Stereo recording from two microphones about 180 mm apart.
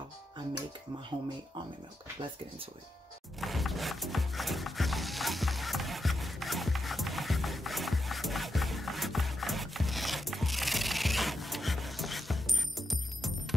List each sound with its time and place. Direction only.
3.3 s music: centre (ahead or behind)